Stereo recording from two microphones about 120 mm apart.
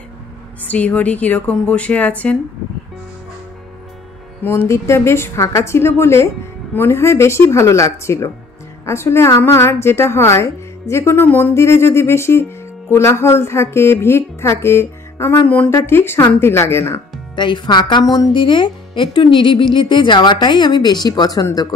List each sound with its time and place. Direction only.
0.7 s speech: 10° left (ahead or behind)
4.4 s a woman's voice: 20° left (ahead or behind)
17.4 s speech: 40° left (ahead or behind)